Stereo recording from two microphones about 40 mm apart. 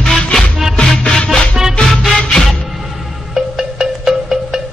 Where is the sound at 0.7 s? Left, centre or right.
Left.